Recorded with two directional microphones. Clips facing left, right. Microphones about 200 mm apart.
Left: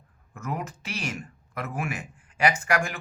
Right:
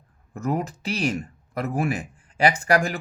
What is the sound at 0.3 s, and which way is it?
Speech, 35° right (ahead or behind).